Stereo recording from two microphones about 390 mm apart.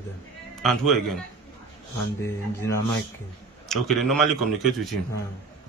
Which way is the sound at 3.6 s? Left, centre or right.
Centre.